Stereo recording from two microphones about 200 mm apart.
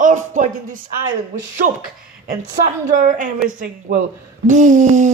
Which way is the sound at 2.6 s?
40° right (ahead or behind).